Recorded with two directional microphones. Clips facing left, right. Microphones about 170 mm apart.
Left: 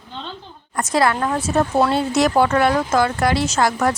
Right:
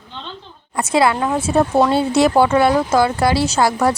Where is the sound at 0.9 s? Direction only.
25° right (ahead or behind).